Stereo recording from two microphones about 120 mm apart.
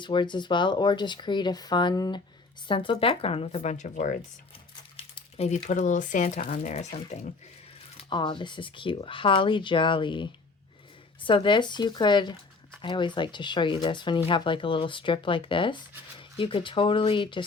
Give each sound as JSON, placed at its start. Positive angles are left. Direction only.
{"t": 0.0, "sound": "speech", "side_deg": 40}
{"t": 4.9, "sound": "a sound", "side_deg": 50}
{"t": 5.6, "sound": "speech", "side_deg": 90}
{"t": 6.5, "sound": "speech", "side_deg": 75}
{"t": 8.1, "sound": "speech", "side_deg": 40}